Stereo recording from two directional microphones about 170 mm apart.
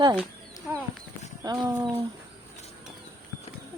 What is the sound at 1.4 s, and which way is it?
Speech, 25° right (ahead or behind).